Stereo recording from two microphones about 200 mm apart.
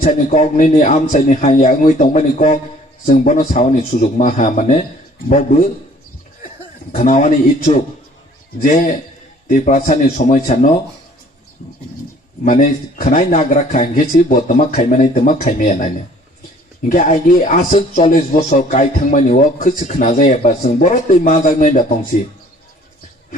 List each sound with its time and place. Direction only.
0.0 s a man's voice: 40° left (ahead or behind)
6.9 s a man's voice: 40° left (ahead or behind)
12.5 s a man's voice: 40° left (ahead or behind)
16.9 s a man's voice: 40° left (ahead or behind)